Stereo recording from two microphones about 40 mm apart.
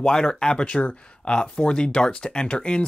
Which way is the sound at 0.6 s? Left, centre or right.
Left.